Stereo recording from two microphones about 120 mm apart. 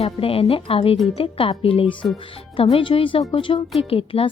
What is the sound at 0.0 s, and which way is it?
Speech, 50° left (ahead or behind).